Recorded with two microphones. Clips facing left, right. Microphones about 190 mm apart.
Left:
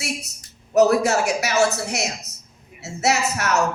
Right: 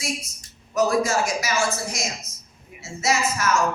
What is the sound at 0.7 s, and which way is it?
A woman's voice, 65° left (ahead or behind).